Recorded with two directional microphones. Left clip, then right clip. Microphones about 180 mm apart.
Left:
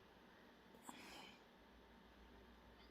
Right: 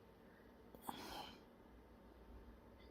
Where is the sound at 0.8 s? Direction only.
30° right (ahead or behind).